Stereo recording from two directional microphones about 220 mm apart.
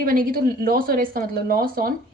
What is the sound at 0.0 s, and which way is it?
A woman's voice, 40° right (ahead or behind).